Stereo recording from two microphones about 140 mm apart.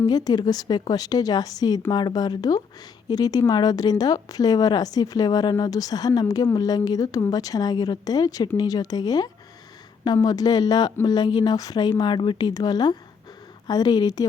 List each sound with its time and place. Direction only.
0.0 s a woman's voice: 30° left (ahead or behind)